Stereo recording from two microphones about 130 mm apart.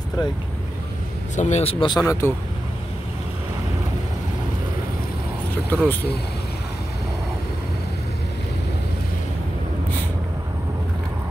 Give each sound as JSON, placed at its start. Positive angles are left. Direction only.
{"t": 1.3, "sound": "speech", "side_deg": 70}
{"t": 1.6, "sound": "a man's voice", "side_deg": 45}
{"t": 2.0, "sound": "speech", "side_deg": 20}
{"t": 5.7, "sound": "speech", "side_deg": 15}